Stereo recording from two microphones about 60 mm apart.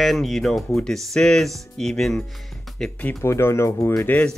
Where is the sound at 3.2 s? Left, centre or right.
Left.